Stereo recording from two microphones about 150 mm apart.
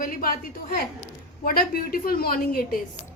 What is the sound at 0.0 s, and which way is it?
A woman's voice, 70° left (ahead or behind).